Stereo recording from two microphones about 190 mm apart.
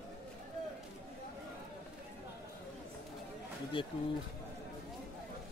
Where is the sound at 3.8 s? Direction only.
25° left (ahead or behind).